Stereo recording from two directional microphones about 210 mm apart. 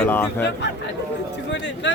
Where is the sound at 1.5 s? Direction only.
55° left (ahead or behind).